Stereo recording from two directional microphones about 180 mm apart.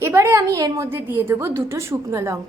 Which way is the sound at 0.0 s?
15° right (ahead or behind).